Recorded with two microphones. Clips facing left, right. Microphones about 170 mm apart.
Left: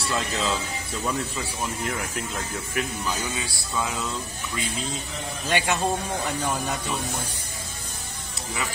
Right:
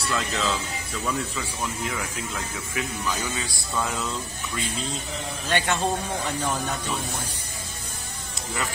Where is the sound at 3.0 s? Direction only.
10° left (ahead or behind).